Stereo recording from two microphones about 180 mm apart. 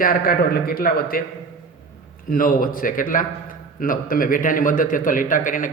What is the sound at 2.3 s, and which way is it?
A man's voice, 50° left (ahead or behind).